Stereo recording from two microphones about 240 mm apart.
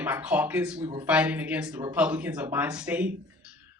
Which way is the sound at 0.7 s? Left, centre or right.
Centre.